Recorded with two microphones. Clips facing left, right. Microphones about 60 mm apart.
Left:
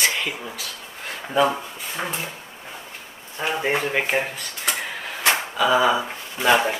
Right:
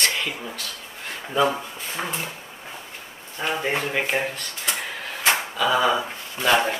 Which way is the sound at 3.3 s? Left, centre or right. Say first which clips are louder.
Left 2 dB; centre.